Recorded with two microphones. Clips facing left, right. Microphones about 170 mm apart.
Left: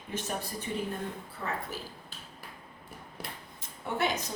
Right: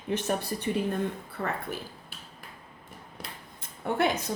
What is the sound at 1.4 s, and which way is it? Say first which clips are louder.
Speech: right 5 dB; 65° right (ahead or behind).